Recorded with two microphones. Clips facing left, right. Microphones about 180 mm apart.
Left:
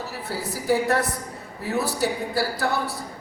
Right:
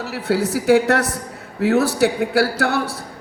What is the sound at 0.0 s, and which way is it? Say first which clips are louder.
A man's voice: right 10 dB; 80° right.